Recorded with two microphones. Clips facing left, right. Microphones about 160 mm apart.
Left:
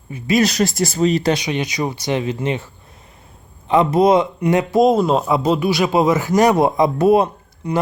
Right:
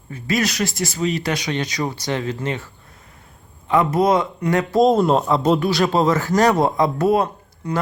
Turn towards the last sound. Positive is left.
turn(degrees=20)  # may be behind; listen again after turning